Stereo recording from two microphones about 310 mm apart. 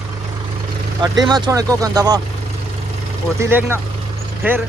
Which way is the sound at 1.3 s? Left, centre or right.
Centre.